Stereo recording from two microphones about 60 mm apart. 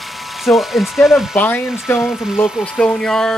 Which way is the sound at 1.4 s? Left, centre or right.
Left.